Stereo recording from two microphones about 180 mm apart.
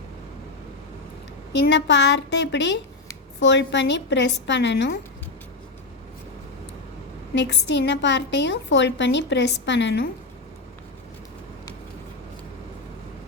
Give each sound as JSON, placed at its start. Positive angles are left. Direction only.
{"t": 1.5, "sound": "a woman's voice", "side_deg": 75}
{"t": 7.3, "sound": "a woman's voice", "side_deg": 75}